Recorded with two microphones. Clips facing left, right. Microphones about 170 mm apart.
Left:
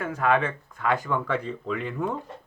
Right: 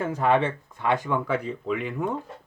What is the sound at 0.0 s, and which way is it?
Speech, 30° right (ahead or behind).